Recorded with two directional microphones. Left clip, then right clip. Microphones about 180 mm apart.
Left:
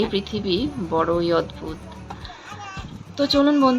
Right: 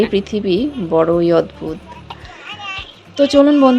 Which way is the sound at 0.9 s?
30° right (ahead or behind).